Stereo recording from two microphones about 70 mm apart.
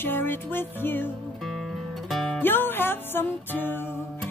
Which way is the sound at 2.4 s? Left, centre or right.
Left.